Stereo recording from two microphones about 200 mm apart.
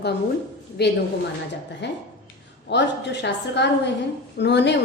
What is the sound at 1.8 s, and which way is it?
A woman's voice, 60° left (ahead or behind).